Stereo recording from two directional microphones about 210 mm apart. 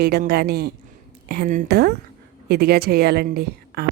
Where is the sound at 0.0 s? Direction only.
50° right (ahead or behind).